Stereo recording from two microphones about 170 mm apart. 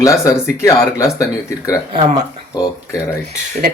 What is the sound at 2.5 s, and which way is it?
Speech, 20° left (ahead or behind).